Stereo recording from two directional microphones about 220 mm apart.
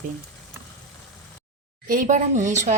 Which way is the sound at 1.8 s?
35° right (ahead or behind).